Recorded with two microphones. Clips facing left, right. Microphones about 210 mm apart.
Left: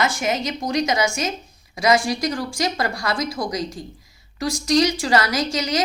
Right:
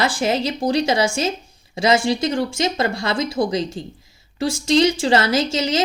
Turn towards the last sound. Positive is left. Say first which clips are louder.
# right 3 dB
turn(degrees=-25)  # may be behind; listen again after turning